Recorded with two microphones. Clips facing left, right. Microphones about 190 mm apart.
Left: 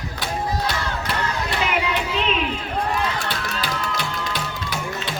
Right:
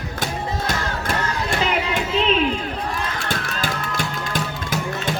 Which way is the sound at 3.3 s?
45° right (ahead or behind).